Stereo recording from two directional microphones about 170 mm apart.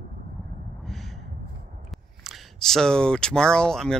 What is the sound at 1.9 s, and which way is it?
Speech, centre (ahead or behind).